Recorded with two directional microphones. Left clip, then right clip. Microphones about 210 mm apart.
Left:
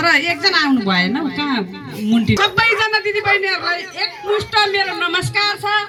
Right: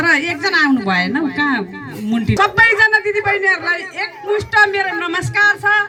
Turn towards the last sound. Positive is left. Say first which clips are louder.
# right 4 dB
turn(degrees=-5)  # may be behind; listen again after turning